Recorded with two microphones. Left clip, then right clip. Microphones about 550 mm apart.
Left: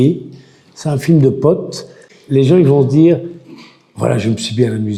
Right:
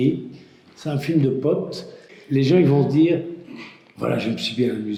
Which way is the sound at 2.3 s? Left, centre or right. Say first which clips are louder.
Left 7 dB; left.